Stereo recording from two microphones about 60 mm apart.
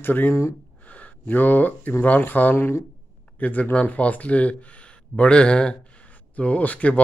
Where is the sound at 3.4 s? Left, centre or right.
Left.